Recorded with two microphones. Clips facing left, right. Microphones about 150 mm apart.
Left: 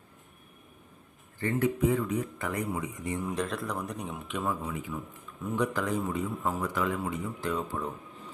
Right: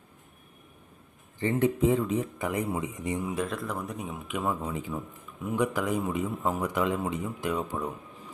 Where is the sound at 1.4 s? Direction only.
20° right (ahead or behind).